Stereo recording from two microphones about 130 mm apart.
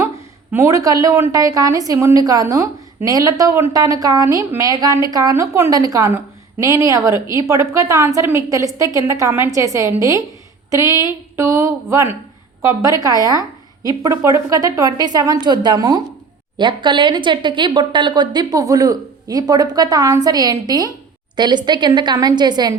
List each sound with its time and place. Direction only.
0.5 s a woman's voice: 20° right (ahead or behind)
13.8 s a woman's voice: 30° right (ahead or behind)